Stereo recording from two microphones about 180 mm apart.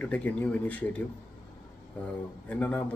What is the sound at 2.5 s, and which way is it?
Speech, 10° left (ahead or behind).